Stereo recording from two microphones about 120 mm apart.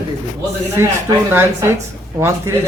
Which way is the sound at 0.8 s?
20° right (ahead or behind).